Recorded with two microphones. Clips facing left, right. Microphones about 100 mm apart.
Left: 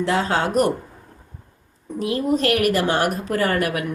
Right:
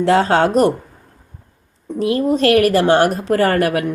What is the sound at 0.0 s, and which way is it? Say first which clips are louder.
Speech: right 7 dB; 60° right (ahead or behind).